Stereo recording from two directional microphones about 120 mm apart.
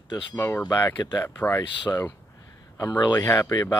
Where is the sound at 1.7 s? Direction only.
40° left (ahead or behind).